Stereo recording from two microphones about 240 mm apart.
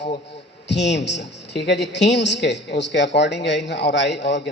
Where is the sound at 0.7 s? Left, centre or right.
Left.